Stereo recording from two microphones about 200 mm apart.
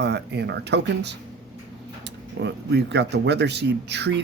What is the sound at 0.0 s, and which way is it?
Speech, 55° right (ahead or behind).